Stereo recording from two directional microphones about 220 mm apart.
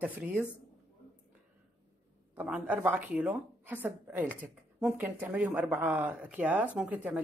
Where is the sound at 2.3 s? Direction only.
5° right (ahead or behind).